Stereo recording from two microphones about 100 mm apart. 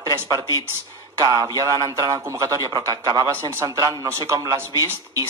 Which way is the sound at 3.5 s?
30° right (ahead or behind).